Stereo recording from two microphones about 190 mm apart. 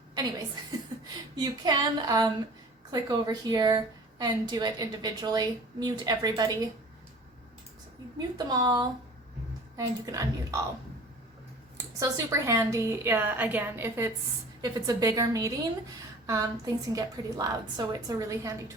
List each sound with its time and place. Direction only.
1.4 s a woman's voice: 20° right (ahead or behind)
8.4 s a woman's voice: 20° right (ahead or behind)
11.9 s a woman's voice: 15° right (ahead or behind)